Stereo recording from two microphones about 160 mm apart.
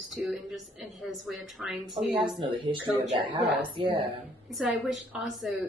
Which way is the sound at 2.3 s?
30° right (ahead or behind).